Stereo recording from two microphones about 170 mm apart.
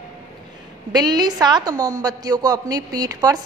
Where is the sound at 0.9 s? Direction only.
25° right (ahead or behind).